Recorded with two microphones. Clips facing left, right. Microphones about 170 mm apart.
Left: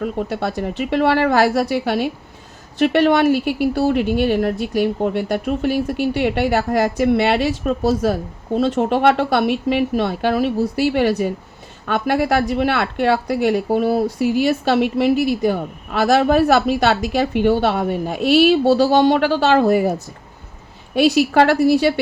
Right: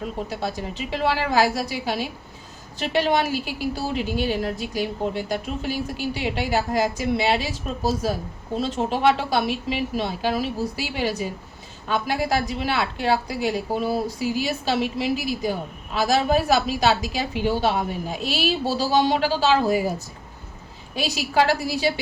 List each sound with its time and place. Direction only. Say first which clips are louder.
0.0 s a woman's voice: left 6 dB; 60° left (ahead or behind)